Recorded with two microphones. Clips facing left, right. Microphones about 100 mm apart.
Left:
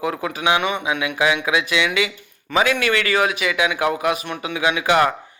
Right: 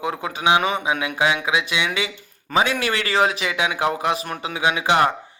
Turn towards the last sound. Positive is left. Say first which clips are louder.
# left 1 dB
turn(degrees=-25)  # may be behind; listen again after turning